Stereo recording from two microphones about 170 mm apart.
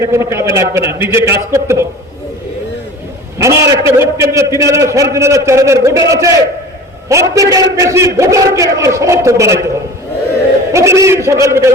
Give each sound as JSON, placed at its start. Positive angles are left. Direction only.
{"t": 0.0, "sound": "a man's voice", "side_deg": -15}
{"t": 3.3, "sound": "a man's voice", "side_deg": -15}
{"t": 10.7, "sound": "a man's voice", "side_deg": -15}